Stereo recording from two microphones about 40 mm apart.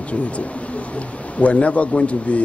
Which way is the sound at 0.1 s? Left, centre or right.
Left.